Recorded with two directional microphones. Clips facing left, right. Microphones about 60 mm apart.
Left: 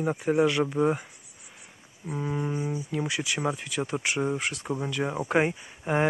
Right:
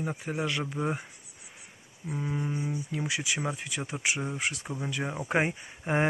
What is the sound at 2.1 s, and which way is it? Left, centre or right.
Speech, centre.